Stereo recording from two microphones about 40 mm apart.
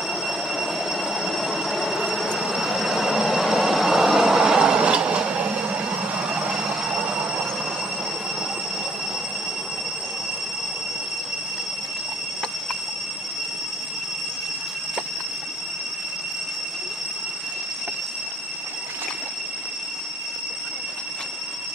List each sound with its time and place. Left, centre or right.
0.1 s train: centre; by 6.3 s right
6.4 s train: centre